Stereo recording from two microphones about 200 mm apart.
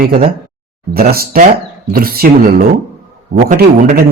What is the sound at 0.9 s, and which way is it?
Speech, 50° right (ahead or behind).